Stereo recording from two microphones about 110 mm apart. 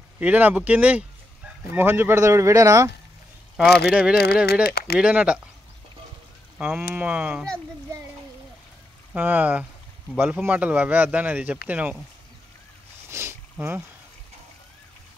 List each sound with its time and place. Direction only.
0.2 s speech: 15° right (ahead or behind); by 2.9 s 30° right (ahead or behind)
3.5 s speech: 5° right (ahead or behind)
6.6 s speech: 10° right (ahead or behind)
9.1 s speech: 15° right (ahead or behind)
13.1 s boat: 25° right (ahead or behind)